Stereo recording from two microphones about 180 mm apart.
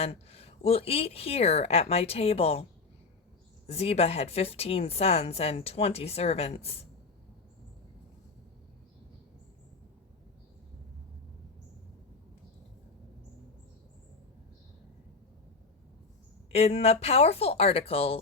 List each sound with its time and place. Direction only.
0.0 s a woman's voice: 35° left (ahead or behind)
3.7 s a woman's voice: 35° left (ahead or behind)
16.5 s a woman's voice: 35° left (ahead or behind)